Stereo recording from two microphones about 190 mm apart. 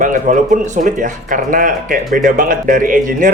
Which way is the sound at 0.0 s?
45° right (ahead or behind).